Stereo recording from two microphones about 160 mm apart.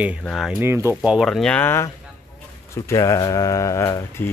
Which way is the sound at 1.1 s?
Centre (ahead or behind).